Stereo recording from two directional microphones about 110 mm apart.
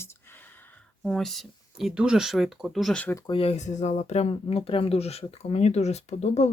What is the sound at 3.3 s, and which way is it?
Speech, 65° left (ahead or behind).